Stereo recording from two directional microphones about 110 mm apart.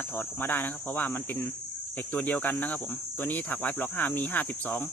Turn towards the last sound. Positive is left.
turn(degrees=15)  # may be behind; listen again after turning